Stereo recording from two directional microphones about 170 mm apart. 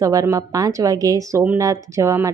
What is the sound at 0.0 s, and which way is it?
Speech, 20° right (ahead or behind).